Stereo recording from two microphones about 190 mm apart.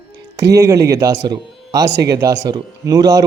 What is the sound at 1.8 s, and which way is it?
Speech, 65° right (ahead or behind).